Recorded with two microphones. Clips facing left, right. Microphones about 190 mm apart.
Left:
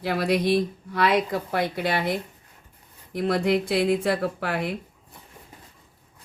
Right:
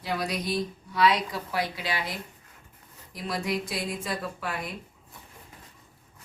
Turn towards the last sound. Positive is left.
turn(degrees=65)  # may be behind; listen again after turning